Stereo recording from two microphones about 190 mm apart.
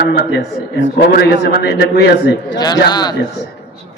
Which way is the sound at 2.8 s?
20° left (ahead or behind).